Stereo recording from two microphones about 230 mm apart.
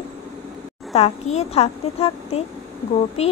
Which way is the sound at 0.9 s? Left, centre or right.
Left.